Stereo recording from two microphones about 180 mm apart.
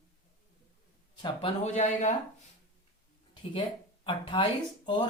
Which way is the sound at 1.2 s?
30° left (ahead or behind).